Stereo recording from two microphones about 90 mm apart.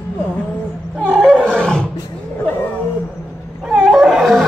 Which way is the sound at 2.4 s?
25° left (ahead or behind).